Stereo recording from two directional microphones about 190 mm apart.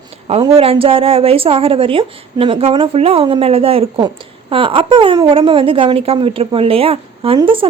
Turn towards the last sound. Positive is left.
turn(degrees=-30)  # may be behind; listen again after turning